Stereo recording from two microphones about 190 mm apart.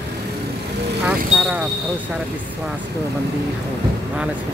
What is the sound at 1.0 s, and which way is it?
Speech, 5° right (ahead or behind).